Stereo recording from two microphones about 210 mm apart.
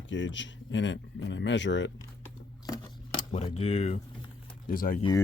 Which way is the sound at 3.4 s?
30° left (ahead or behind).